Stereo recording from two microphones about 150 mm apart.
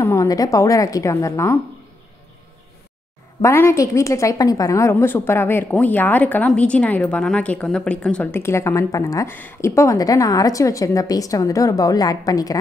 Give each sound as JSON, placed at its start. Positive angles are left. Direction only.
{"t": 0.0, "sound": "a woman's voice", "side_deg": 20}
{"t": 3.4, "sound": "a woman's voice", "side_deg": 20}